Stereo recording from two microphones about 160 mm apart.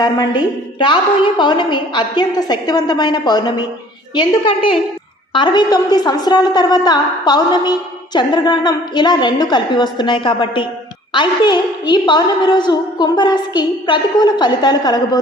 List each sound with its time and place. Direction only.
0.0 s a woman's voice: 30° left (ahead or behind)